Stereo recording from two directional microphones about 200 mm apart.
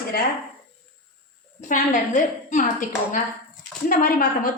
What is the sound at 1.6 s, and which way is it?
A woman's voice, 40° left (ahead or behind).